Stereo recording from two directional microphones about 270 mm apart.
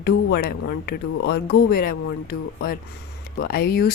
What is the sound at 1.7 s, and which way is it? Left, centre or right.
Speech, left.